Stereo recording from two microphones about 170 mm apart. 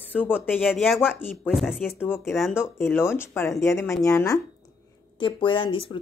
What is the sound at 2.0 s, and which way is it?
Speech, 15° left (ahead or behind).